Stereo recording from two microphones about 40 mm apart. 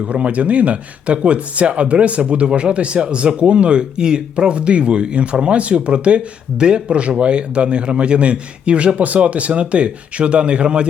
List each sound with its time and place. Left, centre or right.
0.0 s speech: right